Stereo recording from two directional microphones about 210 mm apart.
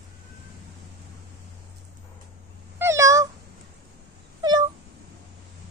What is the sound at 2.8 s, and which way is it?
Cat, 15° right (ahead or behind).